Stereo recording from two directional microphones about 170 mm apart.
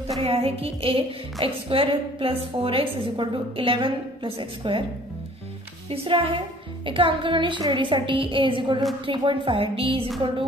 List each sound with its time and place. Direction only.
0.2 s a woman's voice: 35° right (ahead or behind)
5.9 s a woman's voice: 30° right (ahead or behind)